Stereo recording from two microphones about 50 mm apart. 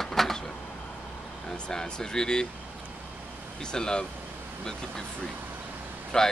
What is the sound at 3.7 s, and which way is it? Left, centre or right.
Speech, centre.